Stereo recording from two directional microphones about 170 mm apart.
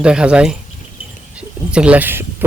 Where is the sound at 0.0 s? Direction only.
5° right (ahead or behind).